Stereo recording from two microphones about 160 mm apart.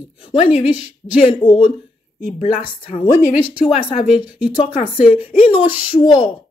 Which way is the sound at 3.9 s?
5° right (ahead or behind).